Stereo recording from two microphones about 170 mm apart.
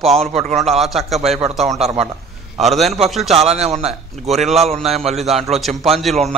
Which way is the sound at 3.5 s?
40° right (ahead or behind).